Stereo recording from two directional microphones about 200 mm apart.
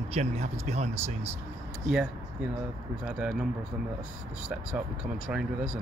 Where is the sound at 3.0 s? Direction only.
5° right (ahead or behind).